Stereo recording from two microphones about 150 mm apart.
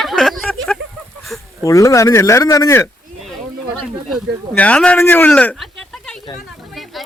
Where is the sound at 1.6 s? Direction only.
20° left (ahead or behind).